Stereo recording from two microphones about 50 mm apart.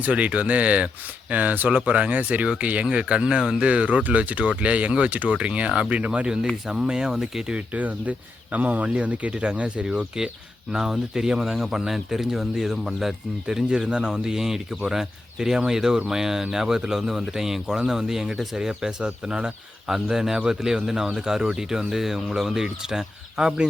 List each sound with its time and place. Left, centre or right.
0.0 s speech: right
7.8 s speech: right
10.7 s speech: centre
19.9 s speech: centre